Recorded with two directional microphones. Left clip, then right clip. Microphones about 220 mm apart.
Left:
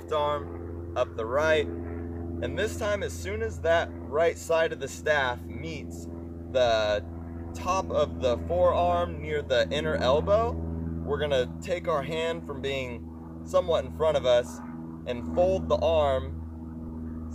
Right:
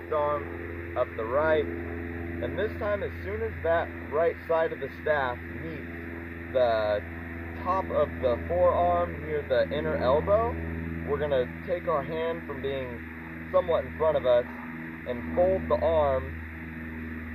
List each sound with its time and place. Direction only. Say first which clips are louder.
0.1 s speech: even; 30° left (ahead or behind)